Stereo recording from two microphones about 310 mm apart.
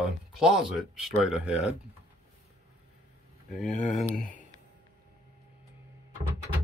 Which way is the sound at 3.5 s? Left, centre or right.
Left.